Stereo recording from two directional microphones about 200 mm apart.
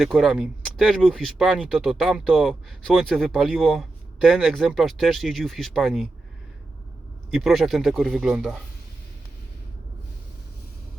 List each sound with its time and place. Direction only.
0.0 s speech: centre (ahead or behind)
7.3 s speech: centre (ahead or behind)